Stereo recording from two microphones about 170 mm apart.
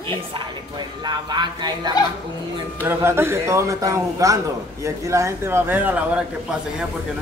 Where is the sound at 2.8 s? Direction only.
15° right (ahead or behind).